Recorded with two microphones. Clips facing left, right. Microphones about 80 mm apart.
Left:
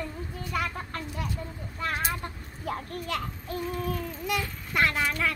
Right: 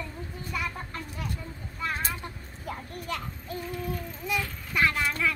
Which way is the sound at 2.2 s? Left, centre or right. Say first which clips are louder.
Left 2 dB; left.